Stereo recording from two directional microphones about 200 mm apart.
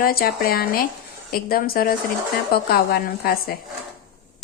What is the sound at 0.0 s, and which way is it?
A woman's voice, 45° left (ahead or behind).